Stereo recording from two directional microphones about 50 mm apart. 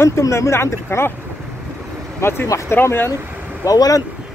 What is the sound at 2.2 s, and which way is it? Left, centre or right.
Speech, left.